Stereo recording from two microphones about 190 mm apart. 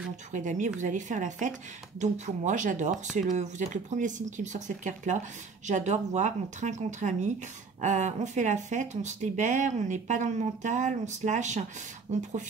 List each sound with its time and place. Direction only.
0.3 s speech: 40° right (ahead or behind)